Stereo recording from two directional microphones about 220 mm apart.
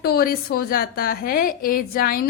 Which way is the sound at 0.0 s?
45° left (ahead or behind).